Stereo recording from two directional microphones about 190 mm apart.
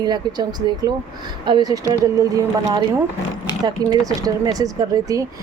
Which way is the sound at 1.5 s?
20° right (ahead or behind).